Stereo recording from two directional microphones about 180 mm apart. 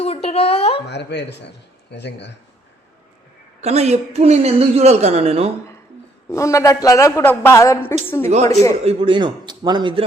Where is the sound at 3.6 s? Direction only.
35° right (ahead or behind).